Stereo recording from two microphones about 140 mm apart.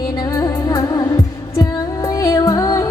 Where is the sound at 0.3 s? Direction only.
20° left (ahead or behind).